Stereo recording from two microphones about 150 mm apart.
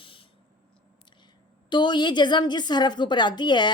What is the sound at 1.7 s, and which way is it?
A woman's voice, 30° left (ahead or behind).